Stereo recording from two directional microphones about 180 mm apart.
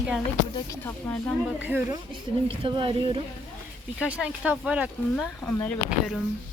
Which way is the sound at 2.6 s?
30° right (ahead or behind).